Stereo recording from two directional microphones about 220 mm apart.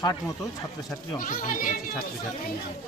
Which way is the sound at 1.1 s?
40° left (ahead or behind).